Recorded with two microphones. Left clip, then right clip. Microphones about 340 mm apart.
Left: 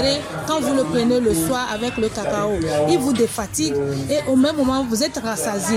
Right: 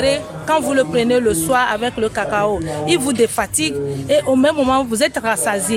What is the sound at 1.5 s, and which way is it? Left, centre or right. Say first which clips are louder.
A woman's voice: right 6 dB; right.